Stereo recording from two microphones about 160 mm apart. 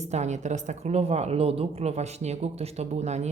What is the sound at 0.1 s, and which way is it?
A woman's voice, 45° right (ahead or behind).